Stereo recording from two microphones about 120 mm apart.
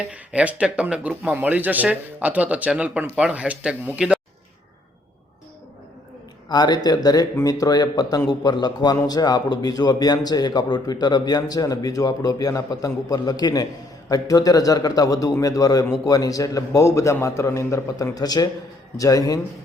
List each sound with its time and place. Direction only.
0.0 s speech: 10° right (ahead or behind)
6.5 s a man's voice: 35° left (ahead or behind)